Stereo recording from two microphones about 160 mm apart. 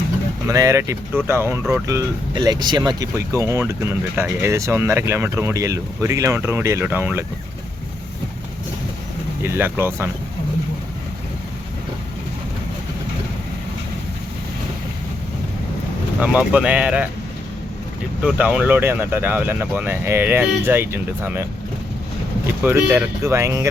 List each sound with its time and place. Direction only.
0.4 s speech: 20° right (ahead or behind)
9.4 s speech: 15° right (ahead or behind)
16.2 s speech: 5° right (ahead or behind)
18.2 s speech: 5° right (ahead or behind)
22.6 s speech: 15° right (ahead or behind)